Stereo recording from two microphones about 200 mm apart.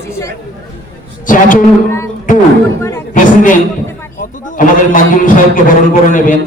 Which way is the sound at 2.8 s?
10° left (ahead or behind).